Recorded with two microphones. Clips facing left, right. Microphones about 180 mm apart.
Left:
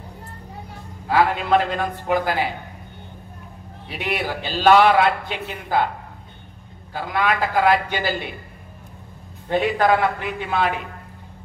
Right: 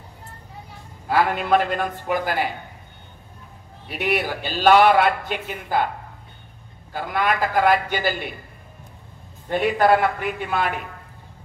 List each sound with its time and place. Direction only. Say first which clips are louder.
1.1 s a man's voice: left 1 dB; 50° right (ahead or behind)
3.9 s a man's voice: right 2 dB; 50° right (ahead or behind)
6.9 s a man's voice: left 1 dB; 50° right (ahead or behind)
9.6 s a man's voice: right 1 dB; 50° right (ahead or behind)